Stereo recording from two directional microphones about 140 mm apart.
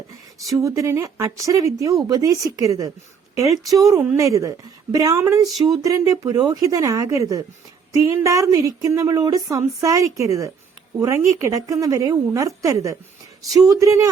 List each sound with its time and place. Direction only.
0.6 s a woman's voice: 20° right (ahead or behind)